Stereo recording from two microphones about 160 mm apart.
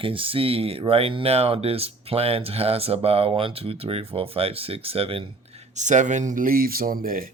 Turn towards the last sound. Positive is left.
turn(degrees=-65)  # may be behind; listen again after turning